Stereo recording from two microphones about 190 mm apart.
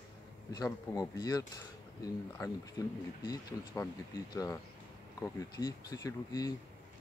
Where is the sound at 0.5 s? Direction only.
20° left (ahead or behind).